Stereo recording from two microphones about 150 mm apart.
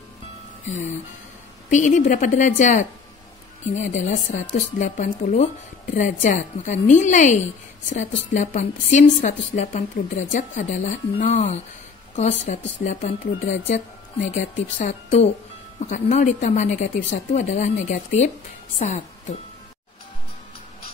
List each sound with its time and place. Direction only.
1.7 s a woman's voice: 55° left (ahead or behind)